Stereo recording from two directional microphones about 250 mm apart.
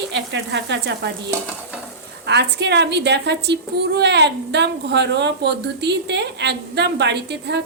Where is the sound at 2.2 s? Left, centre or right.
Right.